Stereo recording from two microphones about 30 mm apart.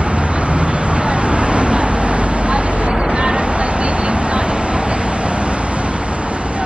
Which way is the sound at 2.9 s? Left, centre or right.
Right.